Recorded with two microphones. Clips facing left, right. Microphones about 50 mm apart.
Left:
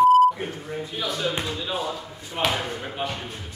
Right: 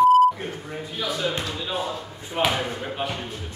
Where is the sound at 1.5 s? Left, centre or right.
Centre.